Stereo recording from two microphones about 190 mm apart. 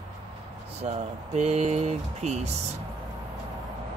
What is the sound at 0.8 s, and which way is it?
Speech, 35° right (ahead or behind).